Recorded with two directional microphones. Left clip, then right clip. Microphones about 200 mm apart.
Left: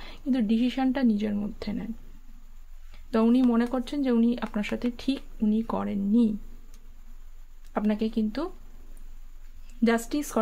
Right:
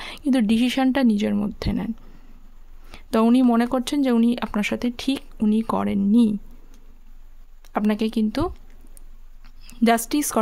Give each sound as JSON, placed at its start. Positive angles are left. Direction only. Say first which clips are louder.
{"t": 0.0, "sound": "a woman's voice", "louder": "right 7 dB", "side_deg": -45}
{"t": 2.9, "sound": "speech", "louder": "right 5 dB", "side_deg": -40}
{"t": 7.6, "sound": "a woman's voice", "louder": "right 5 dB", "side_deg": -40}
{"t": 9.7, "sound": "a woman's voice", "louder": "right 6 dB", "side_deg": -40}